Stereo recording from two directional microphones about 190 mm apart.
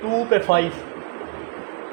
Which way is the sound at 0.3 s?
65° left (ahead or behind).